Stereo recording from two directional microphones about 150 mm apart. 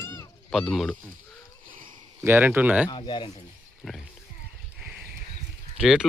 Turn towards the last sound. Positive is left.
turn(degrees=-5)  # may be behind; listen again after turning